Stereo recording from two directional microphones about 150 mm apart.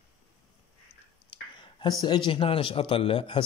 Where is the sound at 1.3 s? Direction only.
30° left (ahead or behind).